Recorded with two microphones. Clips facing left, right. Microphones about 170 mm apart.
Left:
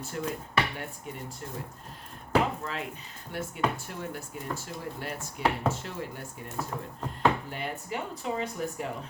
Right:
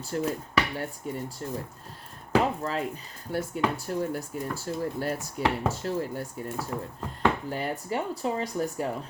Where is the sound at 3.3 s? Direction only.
35° right (ahead or behind).